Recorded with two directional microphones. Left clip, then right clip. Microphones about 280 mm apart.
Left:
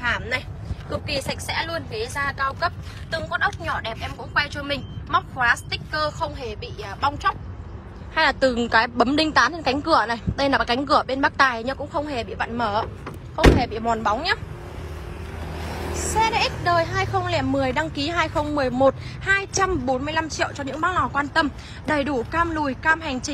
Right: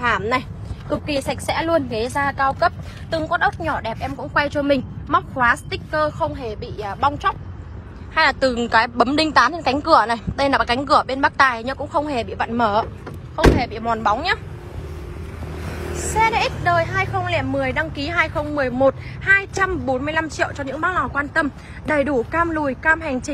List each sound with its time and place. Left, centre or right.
0.0 s speech: centre
0.9 s a woman's voice: centre
15.7 s vehicle: left
16.2 s a woman's voice: centre